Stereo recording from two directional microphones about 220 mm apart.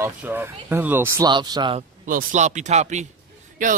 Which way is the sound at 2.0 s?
35° right (ahead or behind).